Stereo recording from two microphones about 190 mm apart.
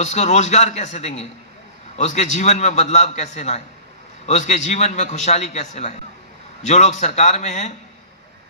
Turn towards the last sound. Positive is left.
turn(degrees=35)  # may be behind; listen again after turning